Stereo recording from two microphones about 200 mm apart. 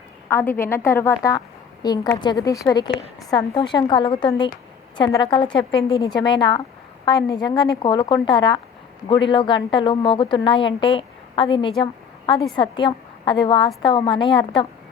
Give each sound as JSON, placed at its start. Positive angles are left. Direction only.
{"t": 0.3, "sound": "a woman's voice", "side_deg": 10}
{"t": 11.8, "sound": "a sound", "side_deg": 25}
{"t": 12.5, "sound": "a woman's voice", "side_deg": 25}